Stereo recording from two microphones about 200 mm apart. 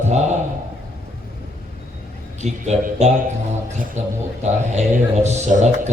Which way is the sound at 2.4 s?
35° right (ahead or behind).